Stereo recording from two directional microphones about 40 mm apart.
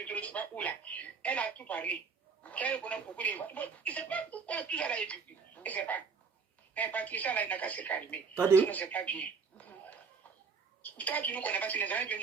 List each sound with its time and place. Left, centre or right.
0.1 s speech: left
5.6 s a woman's voice: left
8.4 s speech: right
8.6 s a sound: left
10.9 s speech: left